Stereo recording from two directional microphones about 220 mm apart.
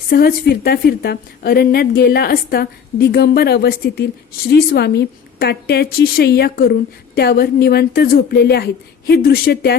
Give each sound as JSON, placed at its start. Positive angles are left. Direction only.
{"t": 0.1, "sound": "a woman's voice", "side_deg": 45}